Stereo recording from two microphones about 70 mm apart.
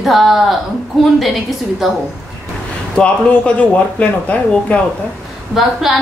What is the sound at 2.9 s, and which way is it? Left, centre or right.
A man's voice, centre.